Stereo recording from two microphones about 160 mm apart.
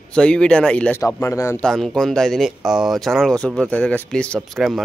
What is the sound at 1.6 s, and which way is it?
Speech, 5° left (ahead or behind).